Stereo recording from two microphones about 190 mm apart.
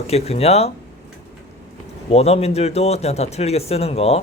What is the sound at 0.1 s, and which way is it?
Speech, 35° left (ahead or behind).